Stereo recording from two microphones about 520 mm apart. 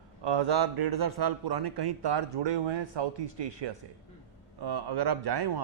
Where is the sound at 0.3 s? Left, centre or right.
Right.